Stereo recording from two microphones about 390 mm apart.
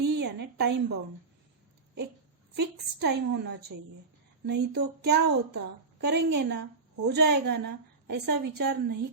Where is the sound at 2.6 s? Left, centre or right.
Right.